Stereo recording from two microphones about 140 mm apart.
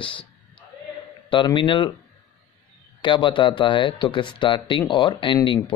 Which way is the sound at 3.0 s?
35° left (ahead or behind).